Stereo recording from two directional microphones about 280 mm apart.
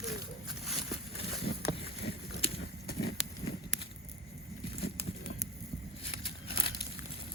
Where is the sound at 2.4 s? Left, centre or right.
Left.